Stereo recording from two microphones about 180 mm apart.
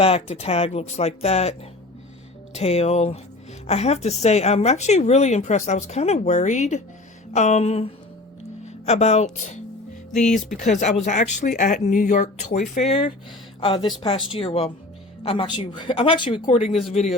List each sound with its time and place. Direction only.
0.0 s speech: 35° left (ahead or behind)
2.6 s speech: 35° left (ahead or behind)
8.6 s a sound: 40° left (ahead or behind)
9.3 s speech: 40° left (ahead or behind)
10.6 s speech: 40° left (ahead or behind)